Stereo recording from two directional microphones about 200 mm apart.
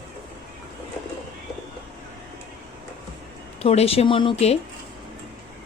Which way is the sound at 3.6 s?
30° left (ahead or behind).